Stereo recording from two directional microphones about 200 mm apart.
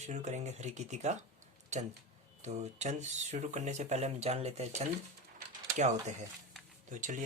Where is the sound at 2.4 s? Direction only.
35° right (ahead or behind).